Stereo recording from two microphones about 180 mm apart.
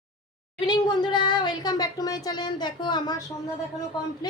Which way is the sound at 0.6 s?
25° left (ahead or behind).